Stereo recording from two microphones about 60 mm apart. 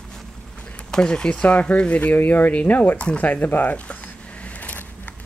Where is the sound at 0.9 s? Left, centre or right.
Centre.